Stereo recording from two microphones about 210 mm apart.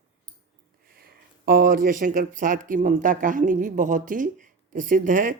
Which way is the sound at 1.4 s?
45° right (ahead or behind).